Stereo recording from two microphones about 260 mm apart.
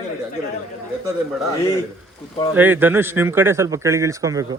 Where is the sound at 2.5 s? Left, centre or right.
Centre.